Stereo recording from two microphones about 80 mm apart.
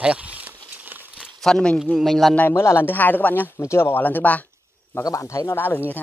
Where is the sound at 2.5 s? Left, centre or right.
Left.